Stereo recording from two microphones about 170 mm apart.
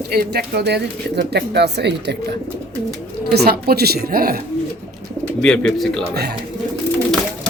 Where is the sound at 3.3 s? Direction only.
65° right (ahead or behind).